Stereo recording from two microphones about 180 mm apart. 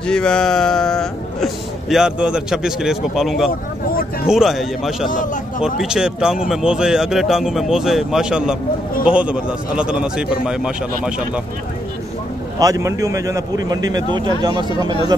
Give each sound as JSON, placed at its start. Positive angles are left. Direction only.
{"t": 0.0, "sound": "a man's voice", "side_deg": 5}
{"t": 5.1, "sound": "a man's voice", "side_deg": 45}
{"t": 5.6, "sound": "a man's voice", "side_deg": -5}
{"t": 12.5, "sound": "a man's voice", "side_deg": -20}